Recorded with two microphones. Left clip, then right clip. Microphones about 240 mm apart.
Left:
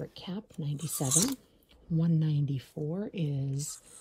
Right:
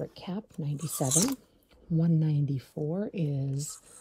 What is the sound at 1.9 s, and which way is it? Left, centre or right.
Speech, centre.